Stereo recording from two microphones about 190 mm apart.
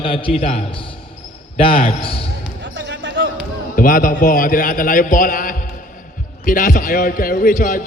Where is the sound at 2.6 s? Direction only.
70° right (ahead or behind).